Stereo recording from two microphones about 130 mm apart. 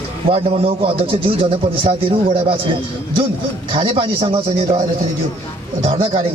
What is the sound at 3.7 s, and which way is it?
Speech, 45° right (ahead or behind).